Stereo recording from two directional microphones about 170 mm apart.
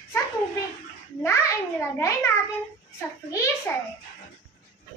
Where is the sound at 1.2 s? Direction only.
15° left (ahead or behind).